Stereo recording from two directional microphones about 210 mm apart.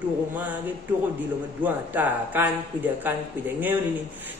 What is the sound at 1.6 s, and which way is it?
A woman's voice, 10° right (ahead or behind).